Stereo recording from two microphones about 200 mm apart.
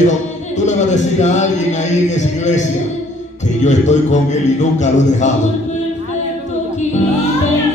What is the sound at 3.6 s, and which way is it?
Speech, 35° left (ahead or behind).